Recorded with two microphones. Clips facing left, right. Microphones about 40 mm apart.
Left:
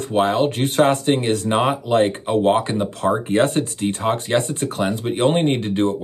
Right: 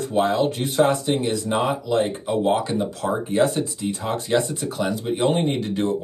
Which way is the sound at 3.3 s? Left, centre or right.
Left.